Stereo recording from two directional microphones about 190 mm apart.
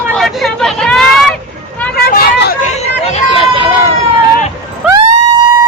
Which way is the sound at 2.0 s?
55° left (ahead or behind).